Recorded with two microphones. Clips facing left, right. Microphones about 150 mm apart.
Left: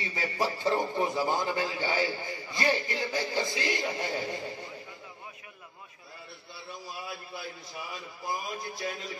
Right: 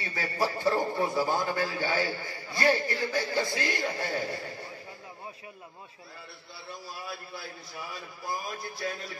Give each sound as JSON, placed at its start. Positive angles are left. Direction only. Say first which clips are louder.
{"t": 0.0, "sound": "a man's voice", "louder": "even", "side_deg": 20}
{"t": 7.1, "sound": "a man's voice", "louder": "even", "side_deg": 20}